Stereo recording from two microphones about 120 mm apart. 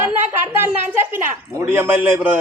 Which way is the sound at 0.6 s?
15° right (ahead or behind).